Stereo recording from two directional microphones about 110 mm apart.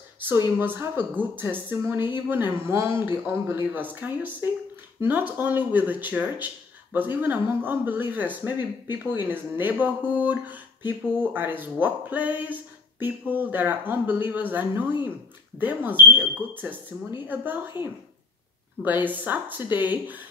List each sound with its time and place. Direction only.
0.6 s speech: 20° right (ahead or behind)